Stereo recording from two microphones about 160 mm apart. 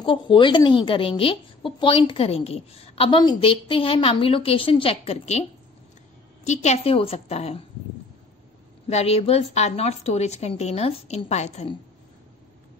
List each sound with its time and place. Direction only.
0.0 s speech: 30° left (ahead or behind)
6.4 s speech: 45° left (ahead or behind)
8.8 s speech: 40° left (ahead or behind)